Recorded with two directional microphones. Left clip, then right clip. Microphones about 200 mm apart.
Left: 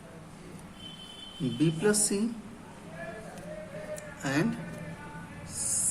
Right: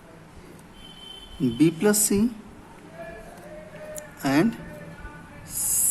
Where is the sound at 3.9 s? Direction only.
45° right (ahead or behind).